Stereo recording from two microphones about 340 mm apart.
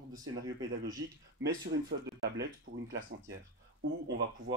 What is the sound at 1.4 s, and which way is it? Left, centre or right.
Speech, right.